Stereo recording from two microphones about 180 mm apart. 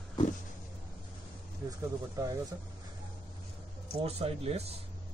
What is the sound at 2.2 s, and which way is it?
Speech, 20° right (ahead or behind).